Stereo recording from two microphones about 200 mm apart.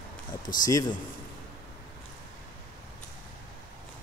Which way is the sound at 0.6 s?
20° left (ahead or behind).